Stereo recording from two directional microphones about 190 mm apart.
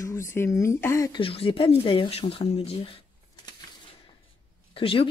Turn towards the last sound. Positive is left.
turn(degrees=30)  # may be behind; listen again after turning